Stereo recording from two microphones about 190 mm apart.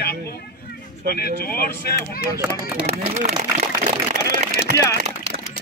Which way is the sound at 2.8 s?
35° right (ahead or behind).